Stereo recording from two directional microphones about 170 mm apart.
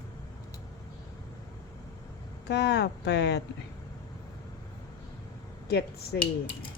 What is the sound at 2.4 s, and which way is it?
Speech, 85° left.